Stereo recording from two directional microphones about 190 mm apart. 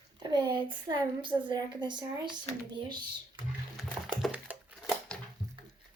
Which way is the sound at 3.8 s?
Centre (ahead or behind).